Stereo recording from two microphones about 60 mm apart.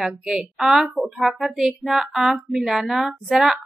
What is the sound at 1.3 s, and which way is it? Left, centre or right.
Music, centre.